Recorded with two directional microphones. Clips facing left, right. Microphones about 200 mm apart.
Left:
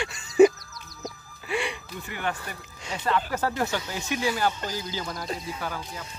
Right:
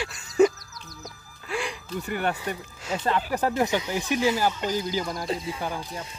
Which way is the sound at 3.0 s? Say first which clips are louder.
Right 1 dB; 15° right (ahead or behind).